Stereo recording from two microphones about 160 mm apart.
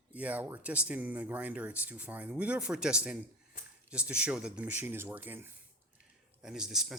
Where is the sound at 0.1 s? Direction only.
10° right (ahead or behind).